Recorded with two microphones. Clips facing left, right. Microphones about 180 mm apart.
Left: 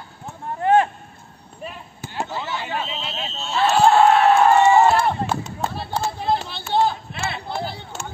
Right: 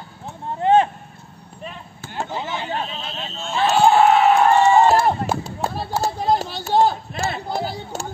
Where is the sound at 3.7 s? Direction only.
Centre (ahead or behind).